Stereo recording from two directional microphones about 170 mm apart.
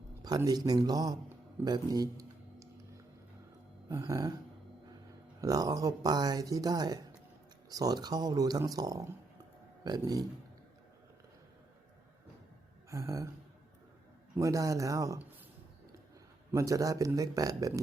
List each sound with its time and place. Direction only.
0.2 s speech: 20° right (ahead or behind)
3.8 s speech: 20° right (ahead or behind)
5.4 s speech: 20° right (ahead or behind)
12.9 s a sound: 15° right (ahead or behind)
14.3 s speech: 20° right (ahead or behind)
16.5 s speech: 20° right (ahead or behind)